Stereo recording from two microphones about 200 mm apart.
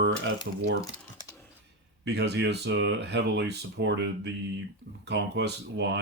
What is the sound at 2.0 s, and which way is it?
Speech, 55° right (ahead or behind).